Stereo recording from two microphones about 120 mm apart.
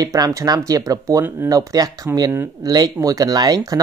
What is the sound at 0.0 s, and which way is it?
Speech, 30° right (ahead or behind).